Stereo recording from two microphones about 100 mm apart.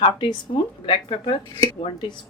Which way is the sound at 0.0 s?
60° left (ahead or behind).